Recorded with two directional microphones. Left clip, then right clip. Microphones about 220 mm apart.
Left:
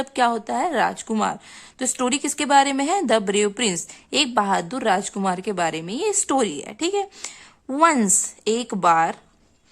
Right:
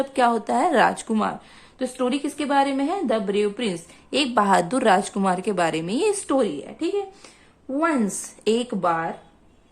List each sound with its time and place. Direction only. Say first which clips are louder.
0.0 s a woman's voice: right 1 dB; 20° left (ahead or behind)
8.4 s a woman's voice: left 2 dB; 15° left (ahead or behind)